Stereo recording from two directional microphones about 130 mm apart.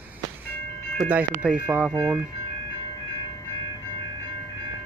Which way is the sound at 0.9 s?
10° right (ahead or behind).